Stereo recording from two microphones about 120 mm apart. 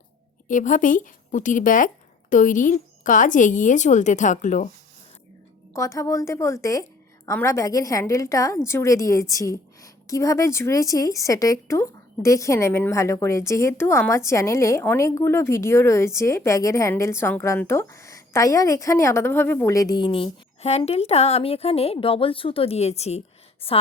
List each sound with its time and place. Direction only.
0.4 s speech: 90° left
5.7 s a woman's voice: 25° left (ahead or behind)
20.0 s a woman's voice: 45° left (ahead or behind)